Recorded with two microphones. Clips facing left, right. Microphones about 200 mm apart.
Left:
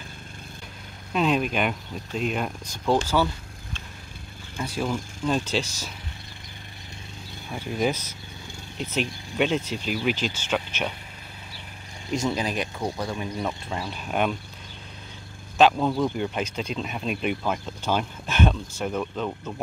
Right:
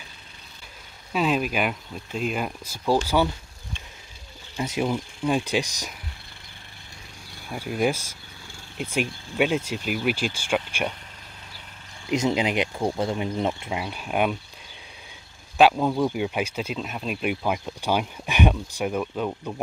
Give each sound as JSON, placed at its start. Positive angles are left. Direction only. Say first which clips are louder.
{"t": 1.1, "sound": "speech", "louder": "even", "side_deg": -5}
{"t": 4.6, "sound": "speech", "louder": "right 2 dB", "side_deg": -20}
{"t": 7.5, "sound": "speech", "louder": "right 1 dB", "side_deg": -10}
{"t": 12.1, "sound": "speech", "louder": "right 3 dB", "side_deg": -20}
{"t": 13.7, "sound": "speech", "louder": "right 1 dB", "side_deg": -10}
{"t": 15.5, "sound": "speech", "louder": "right 1 dB", "side_deg": -10}